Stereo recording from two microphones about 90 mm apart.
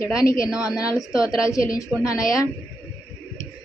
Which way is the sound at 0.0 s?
40° left (ahead or behind).